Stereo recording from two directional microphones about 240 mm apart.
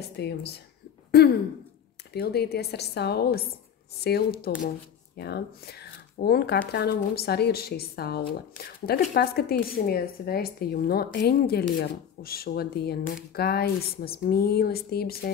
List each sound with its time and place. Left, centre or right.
0.0 s speech: left